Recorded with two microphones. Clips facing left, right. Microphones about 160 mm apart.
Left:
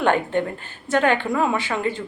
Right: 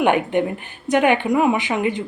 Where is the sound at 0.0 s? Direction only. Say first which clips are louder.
Right 3 dB; 15° right (ahead or behind).